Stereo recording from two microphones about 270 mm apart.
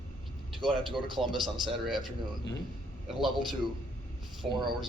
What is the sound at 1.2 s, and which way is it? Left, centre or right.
Speech, centre.